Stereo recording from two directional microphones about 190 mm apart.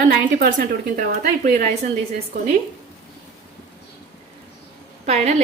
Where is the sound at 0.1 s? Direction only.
50° right (ahead or behind).